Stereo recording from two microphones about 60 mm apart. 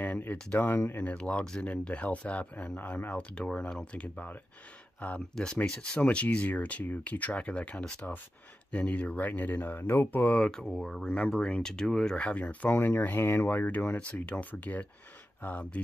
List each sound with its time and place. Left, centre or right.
0.0 s speech: left
5.3 s speech: centre
5.9 s speech: left
10.4 s speech: centre